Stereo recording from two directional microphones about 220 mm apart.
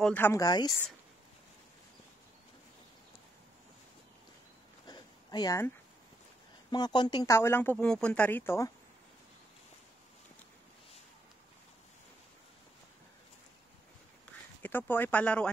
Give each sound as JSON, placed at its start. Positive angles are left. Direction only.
{"t": 0.0, "sound": "speech", "side_deg": 10}
{"t": 4.8, "sound": "a sound", "side_deg": 20}
{"t": 6.7, "sound": "speech", "side_deg": 20}
{"t": 14.6, "sound": "speech", "side_deg": 10}